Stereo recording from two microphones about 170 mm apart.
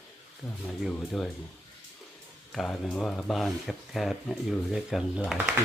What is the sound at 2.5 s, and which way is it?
Speech, 5° left (ahead or behind).